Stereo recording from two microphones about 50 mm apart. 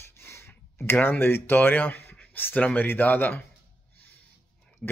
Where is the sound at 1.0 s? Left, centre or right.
Left.